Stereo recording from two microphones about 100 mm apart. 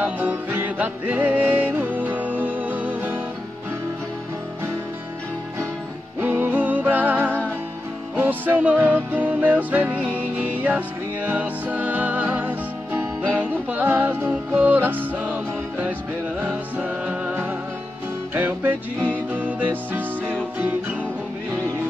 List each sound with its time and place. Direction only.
0.0 s music: 15° right (ahead or behind)
6.1 s music: 15° right (ahead or behind)
11.2 s music: 15° right (ahead or behind)
18.9 s music: 10° left (ahead or behind)
19.3 s music: 15° right (ahead or behind)